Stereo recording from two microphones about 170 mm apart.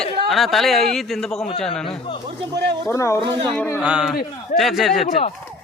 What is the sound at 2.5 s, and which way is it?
Speech, 80° right.